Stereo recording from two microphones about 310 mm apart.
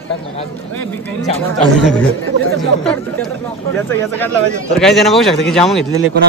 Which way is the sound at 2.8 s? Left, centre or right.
Centre.